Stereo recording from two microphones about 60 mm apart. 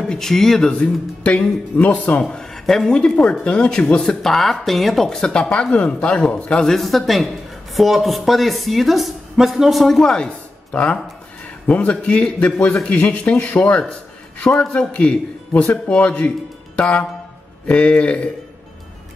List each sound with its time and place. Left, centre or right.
0.0 s speech: centre; by 2.2 s left
2.2 s a man's voice: centre; by 13.6 s left
14.8 s a man's voice: left